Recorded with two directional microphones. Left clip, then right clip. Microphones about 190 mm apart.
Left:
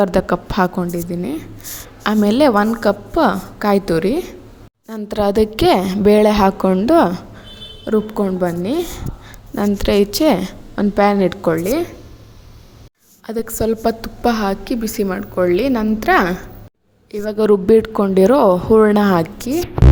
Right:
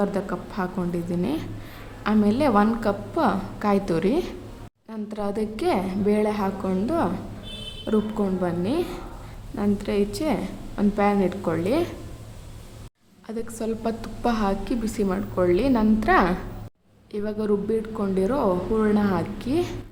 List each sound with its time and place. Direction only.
0.0 s a woman's voice: 45° left (ahead or behind)
0.9 s a woman's voice: 20° left (ahead or behind)
2.0 s a woman's voice: 40° left (ahead or behind); by 4.4 s 25° left (ahead or behind)
4.9 s a woman's voice: 40° left (ahead or behind)
7.9 s a woman's voice: 30° left (ahead or behind)
13.2 s a woman's voice: 35° left (ahead or behind)
14.0 s a woman's voice: 25° left (ahead or behind)
17.3 s a woman's voice: 45° left (ahead or behind)
19.4 s a woman's voice: 25° left (ahead or behind)